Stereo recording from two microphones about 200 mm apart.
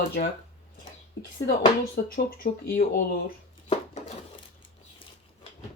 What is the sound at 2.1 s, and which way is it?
Speech, 50° left (ahead or behind).